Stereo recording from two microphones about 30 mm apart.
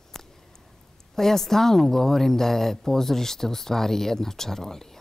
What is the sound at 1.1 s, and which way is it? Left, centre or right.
A woman's voice, centre.